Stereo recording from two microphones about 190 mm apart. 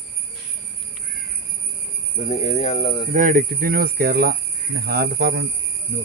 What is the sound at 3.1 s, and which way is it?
Speech, 45° right (ahead or behind).